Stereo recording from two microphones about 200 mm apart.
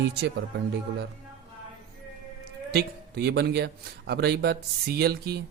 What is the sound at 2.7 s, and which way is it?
Speech, 55° right (ahead or behind).